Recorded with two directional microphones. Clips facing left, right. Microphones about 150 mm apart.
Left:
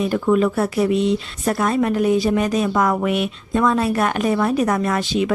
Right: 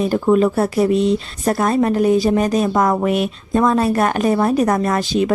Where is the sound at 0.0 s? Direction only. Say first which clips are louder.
Right 3 dB; 35° right (ahead or behind).